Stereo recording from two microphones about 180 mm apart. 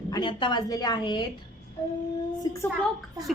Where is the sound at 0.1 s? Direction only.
25° left (ahead or behind).